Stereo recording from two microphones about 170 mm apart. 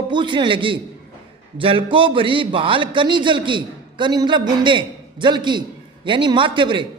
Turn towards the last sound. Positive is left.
turn(degrees=-30)  # may be behind; listen again after turning